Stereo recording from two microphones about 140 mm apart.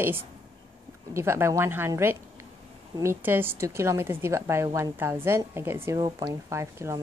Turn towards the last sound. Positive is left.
turn(degrees=-20)  # may be behind; listen again after turning